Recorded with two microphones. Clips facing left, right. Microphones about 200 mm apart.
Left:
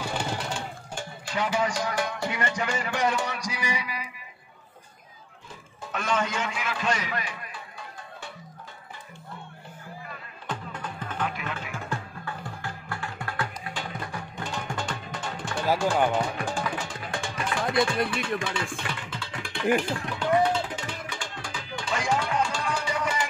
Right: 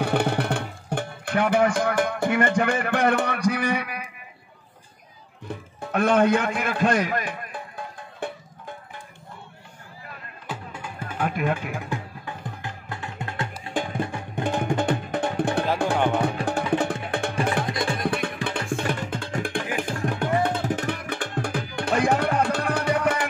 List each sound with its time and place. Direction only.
0.0 s music: 60° right (ahead or behind)
5.5 s music: 60° right (ahead or behind)
10.4 s music: 10° right (ahead or behind)
11.1 s music: 50° right (ahead or behind)
11.9 s music: 20° right (ahead or behind)
14.3 s music: 55° right (ahead or behind)